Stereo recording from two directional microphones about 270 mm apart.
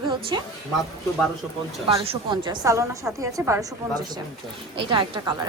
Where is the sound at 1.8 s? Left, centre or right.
Right.